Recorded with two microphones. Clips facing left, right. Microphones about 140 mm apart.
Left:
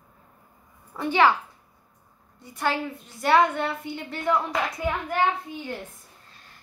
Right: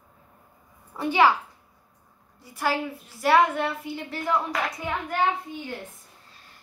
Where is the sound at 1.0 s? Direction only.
15° right (ahead or behind).